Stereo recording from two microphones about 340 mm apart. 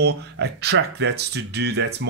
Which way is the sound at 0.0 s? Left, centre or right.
Right.